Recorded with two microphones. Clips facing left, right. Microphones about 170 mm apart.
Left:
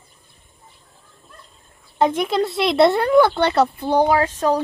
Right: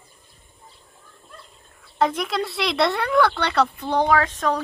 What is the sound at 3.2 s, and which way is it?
Speech, 25° left (ahead or behind).